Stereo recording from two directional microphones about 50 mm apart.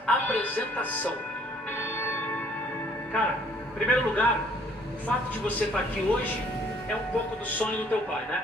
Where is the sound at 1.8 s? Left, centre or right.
Left.